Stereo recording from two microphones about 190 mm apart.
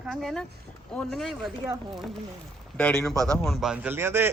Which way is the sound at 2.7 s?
5° left (ahead or behind).